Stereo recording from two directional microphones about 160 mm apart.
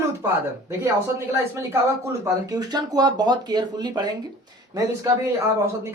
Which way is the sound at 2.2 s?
25° right (ahead or behind).